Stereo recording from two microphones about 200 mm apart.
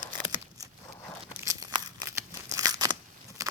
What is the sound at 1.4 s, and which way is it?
Tearing, 15° right (ahead or behind).